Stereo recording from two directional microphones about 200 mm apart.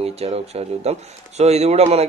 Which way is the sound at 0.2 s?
30° right (ahead or behind).